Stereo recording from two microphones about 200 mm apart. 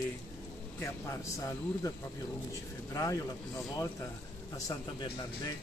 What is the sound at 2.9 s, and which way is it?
Speech, 15° left (ahead or behind).